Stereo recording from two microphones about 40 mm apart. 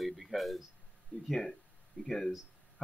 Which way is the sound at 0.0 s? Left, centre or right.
Centre.